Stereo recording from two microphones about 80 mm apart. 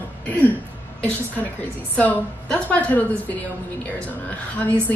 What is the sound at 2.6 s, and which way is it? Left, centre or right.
Speech, left.